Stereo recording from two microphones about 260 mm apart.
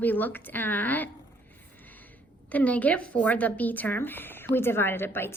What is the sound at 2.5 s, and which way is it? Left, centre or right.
A woman's voice, centre.